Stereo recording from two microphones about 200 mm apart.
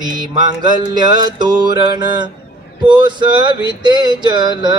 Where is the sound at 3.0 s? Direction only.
20° right (ahead or behind).